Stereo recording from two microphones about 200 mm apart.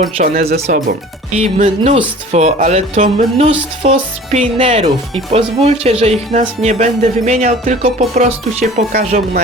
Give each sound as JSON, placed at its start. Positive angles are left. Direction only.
{"t": 0.2, "sound": "speech", "side_deg": -35}